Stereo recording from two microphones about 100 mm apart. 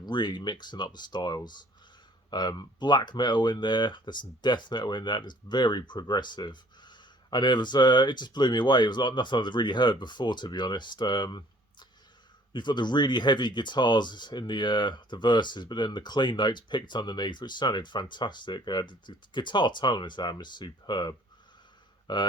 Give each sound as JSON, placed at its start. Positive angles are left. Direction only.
{"t": 0.0, "sound": "speech", "side_deg": 45}